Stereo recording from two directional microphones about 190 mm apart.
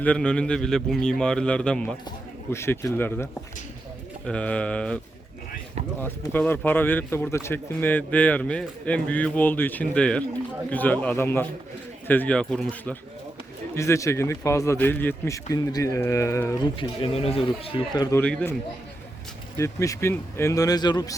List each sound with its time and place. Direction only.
0.0 s a man's voice: 5° left (ahead or behind)
4.3 s a man's voice: 5° left (ahead or behind)
6.0 s a man's voice: 10° left (ahead or behind)
13.7 s a man's voice: 15° left (ahead or behind)
16.7 s speech: 30° left (ahead or behind)
18.2 s a man's voice: 10° left (ahead or behind)
19.5 s a man's voice: 15° left (ahead or behind)